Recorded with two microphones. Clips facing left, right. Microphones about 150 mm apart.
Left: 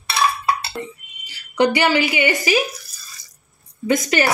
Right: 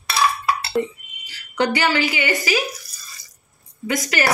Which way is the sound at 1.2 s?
15° left (ahead or behind).